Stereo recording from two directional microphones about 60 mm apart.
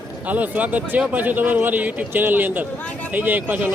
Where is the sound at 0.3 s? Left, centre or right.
Right.